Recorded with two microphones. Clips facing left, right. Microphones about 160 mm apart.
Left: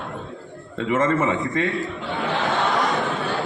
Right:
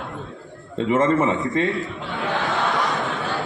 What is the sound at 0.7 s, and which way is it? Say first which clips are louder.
Speech: right 2 dB; 30° right (ahead or behind).